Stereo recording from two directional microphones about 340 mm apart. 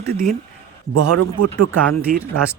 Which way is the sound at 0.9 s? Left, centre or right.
Right.